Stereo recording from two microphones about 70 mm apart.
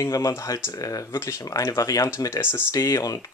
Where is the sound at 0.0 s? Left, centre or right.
Left.